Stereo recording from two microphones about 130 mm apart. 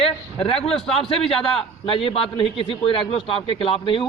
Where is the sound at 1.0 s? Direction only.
45° left (ahead or behind).